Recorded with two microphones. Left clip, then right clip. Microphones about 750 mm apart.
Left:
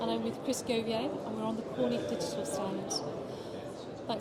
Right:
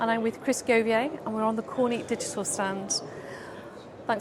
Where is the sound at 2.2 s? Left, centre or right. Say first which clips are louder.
Right 4 dB; right.